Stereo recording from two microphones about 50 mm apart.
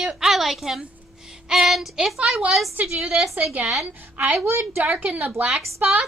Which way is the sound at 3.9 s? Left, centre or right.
Right.